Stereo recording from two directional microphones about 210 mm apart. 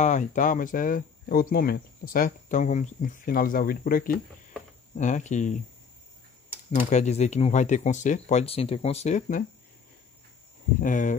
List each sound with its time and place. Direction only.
0.0 s speech: 35° left (ahead or behind)
6.9 s speech: 35° left (ahead or behind)
10.8 s speech: 40° left (ahead or behind)